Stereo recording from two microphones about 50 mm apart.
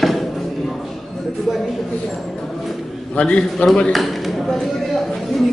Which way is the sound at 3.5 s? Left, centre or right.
Centre.